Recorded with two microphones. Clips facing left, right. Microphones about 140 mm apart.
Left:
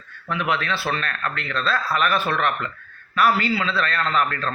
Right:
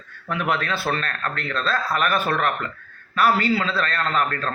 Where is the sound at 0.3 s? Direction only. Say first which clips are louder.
Even; 45° right (ahead or behind).